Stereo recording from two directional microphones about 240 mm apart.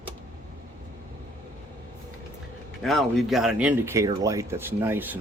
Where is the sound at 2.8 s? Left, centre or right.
Centre.